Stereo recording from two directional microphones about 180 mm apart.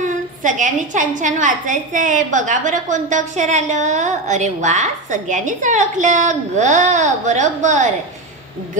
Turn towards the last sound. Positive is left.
turn(degrees=-40)  # may be behind; listen again after turning